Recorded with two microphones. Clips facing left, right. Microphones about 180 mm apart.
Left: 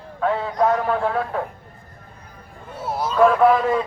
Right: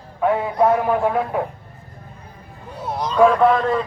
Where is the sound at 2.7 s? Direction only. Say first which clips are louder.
Right 1 dB; 5° left (ahead or behind).